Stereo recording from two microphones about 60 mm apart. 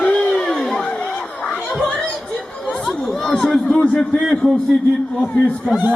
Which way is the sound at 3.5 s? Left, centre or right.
Centre.